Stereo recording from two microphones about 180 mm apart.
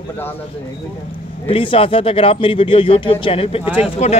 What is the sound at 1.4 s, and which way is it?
Speech, 30° left (ahead or behind).